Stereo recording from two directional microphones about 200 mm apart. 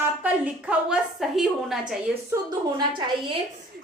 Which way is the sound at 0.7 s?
5° right (ahead or behind).